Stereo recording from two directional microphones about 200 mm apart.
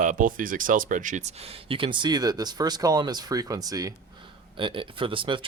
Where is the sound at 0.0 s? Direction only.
40° right (ahead or behind).